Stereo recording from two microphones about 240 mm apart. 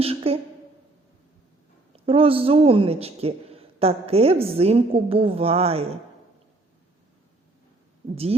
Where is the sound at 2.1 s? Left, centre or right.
Right.